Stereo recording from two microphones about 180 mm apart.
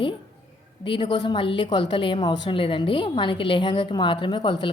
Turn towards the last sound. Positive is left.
turn(degrees=25)  # may be behind; listen again after turning